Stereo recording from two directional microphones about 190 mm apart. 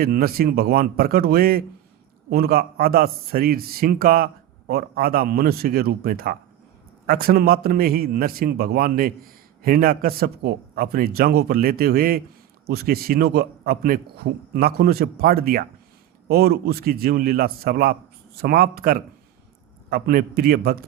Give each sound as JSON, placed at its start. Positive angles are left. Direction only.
{"t": 0.0, "sound": "a man's voice", "side_deg": -50}